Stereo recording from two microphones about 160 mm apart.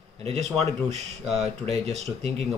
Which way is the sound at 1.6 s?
40° right (ahead or behind).